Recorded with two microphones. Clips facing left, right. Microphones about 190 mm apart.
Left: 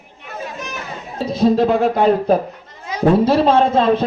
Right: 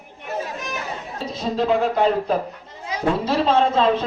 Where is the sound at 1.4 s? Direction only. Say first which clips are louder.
Left 6 dB; 50° left (ahead or behind).